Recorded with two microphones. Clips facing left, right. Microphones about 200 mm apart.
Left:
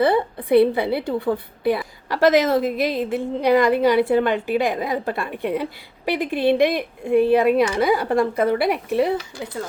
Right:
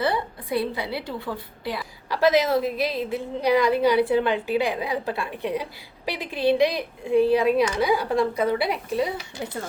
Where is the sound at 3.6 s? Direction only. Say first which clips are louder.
Left 3 dB; 50° left (ahead or behind).